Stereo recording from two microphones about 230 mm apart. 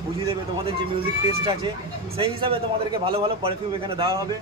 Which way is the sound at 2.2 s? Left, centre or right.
Right.